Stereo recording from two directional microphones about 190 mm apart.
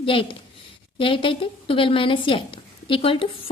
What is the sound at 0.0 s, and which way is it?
Speech, 30° left (ahead or behind).